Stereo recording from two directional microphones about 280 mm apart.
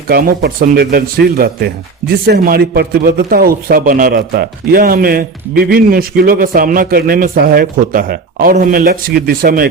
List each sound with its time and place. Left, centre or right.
0.1 s a man's voice: right